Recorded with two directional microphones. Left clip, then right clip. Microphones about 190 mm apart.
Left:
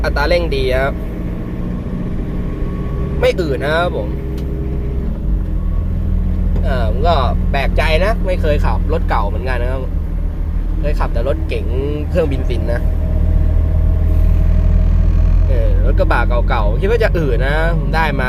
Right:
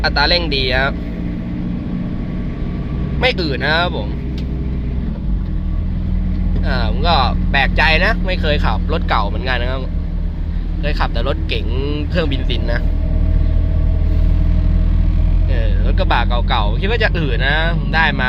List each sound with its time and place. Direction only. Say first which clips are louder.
0.0 s speech: right 1 dB; 15° left (ahead or behind)
3.2 s speech: left 2 dB; 15° left (ahead or behind)
6.7 s speech: left 1 dB; 10° left (ahead or behind)
10.8 s speech: left 1 dB; 10° left (ahead or behind)
15.9 s speech: left 1 dB; 15° left (ahead or behind)